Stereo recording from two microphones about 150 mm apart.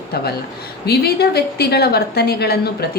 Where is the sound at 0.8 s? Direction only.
90° left.